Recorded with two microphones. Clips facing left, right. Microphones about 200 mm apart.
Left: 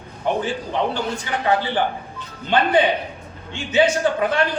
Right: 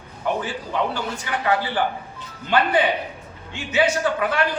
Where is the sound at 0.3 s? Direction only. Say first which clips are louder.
Left 2 dB; 25° left (ahead or behind).